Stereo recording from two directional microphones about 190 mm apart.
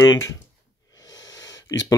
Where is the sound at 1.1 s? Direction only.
20° left (ahead or behind).